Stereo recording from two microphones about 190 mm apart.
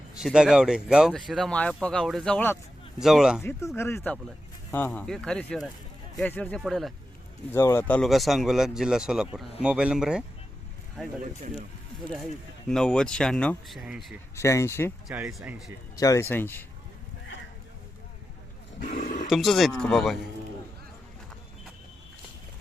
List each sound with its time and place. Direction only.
0.2 s speech: 5° right (ahead or behind)
3.8 s speech: 15° left (ahead or behind)
7.5 s speech: 15° left (ahead or behind); by 10.2 s 5° right (ahead or behind)
12.6 s speech: 5° left (ahead or behind)
14.3 s speech: 15° left (ahead or behind)
15.0 s speech: 5° right (ahead or behind)
16.0 s speech: 15° left (ahead or behind)
18.8 s speech: 45° left (ahead or behind)
19.3 s speech: centre (ahead or behind)